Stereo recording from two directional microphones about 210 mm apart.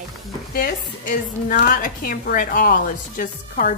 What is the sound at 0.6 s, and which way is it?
A woman's voice, 40° left (ahead or behind).